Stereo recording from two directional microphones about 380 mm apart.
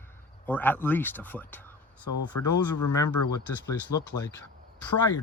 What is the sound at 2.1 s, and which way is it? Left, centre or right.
Speech, left.